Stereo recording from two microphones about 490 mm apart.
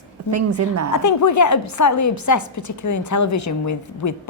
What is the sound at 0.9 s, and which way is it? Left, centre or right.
A woman's voice, left.